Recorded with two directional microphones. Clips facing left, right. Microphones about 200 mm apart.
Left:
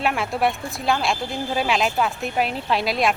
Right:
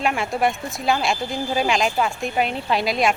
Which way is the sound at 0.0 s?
Centre (ahead or behind).